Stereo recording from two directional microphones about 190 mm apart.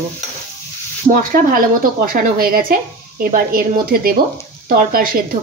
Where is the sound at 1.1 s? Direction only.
45° right (ahead or behind).